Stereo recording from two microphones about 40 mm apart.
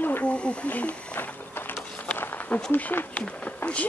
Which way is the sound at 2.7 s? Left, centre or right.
Left.